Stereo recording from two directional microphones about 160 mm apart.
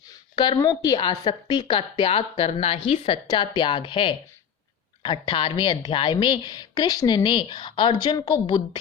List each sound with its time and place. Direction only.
0.1 s a woman's voice: 25° left (ahead or behind)
3.2 s a woman's voice: 25° left (ahead or behind)